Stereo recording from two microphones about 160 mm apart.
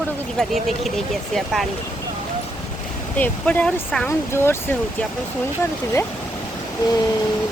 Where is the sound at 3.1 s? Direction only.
10° left (ahead or behind).